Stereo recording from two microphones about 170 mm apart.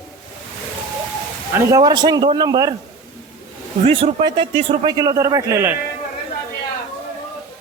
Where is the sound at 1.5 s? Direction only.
20° right (ahead or behind).